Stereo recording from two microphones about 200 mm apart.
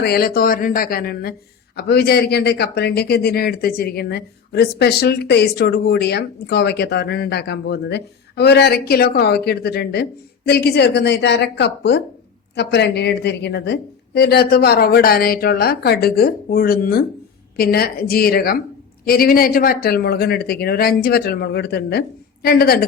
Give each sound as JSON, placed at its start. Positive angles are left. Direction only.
{"t": 0.0, "sound": "a man's voice", "side_deg": 50}